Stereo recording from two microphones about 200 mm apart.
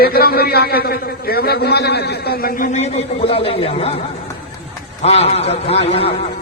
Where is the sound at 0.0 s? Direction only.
50° left (ahead or behind).